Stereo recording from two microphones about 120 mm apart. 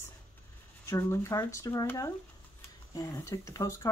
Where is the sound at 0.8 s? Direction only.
25° left (ahead or behind).